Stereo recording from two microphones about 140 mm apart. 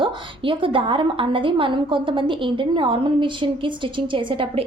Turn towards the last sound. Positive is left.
turn(degrees=-40)  # may be behind; listen again after turning